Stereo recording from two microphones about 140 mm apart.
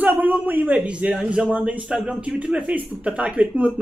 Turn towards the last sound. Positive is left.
turn(degrees=-10)  # may be behind; listen again after turning